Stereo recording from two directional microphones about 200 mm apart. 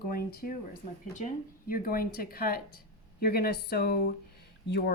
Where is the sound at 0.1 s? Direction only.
50° left (ahead or behind).